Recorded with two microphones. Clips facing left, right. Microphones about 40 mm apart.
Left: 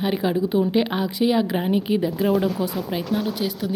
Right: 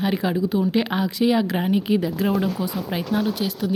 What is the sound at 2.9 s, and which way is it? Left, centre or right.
Speech, centre.